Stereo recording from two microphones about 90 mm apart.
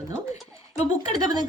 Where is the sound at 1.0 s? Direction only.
50° right (ahead or behind).